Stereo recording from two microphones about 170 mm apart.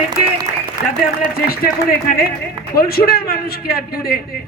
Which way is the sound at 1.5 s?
60° left (ahead or behind).